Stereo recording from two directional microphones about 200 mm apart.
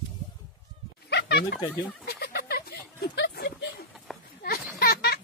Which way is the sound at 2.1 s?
55° left (ahead or behind).